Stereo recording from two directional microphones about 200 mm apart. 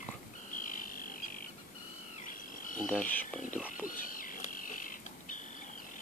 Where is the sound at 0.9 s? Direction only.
45° left (ahead or behind).